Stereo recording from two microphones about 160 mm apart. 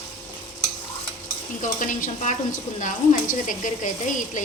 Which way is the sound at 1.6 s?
55° left (ahead or behind).